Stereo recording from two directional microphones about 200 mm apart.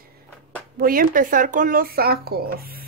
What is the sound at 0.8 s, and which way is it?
Speech, 45° right (ahead or behind).